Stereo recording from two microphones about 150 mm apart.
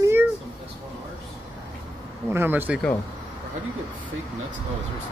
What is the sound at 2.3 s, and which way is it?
Speech, 15° right (ahead or behind).